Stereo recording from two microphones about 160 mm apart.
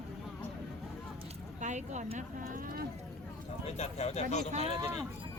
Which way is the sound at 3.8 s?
40° left (ahead or behind).